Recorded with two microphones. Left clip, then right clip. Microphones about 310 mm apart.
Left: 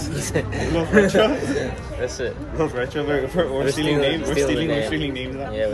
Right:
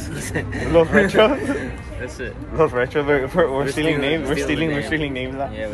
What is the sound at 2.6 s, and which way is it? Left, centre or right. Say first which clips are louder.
A man's voice: right 5 dB; centre.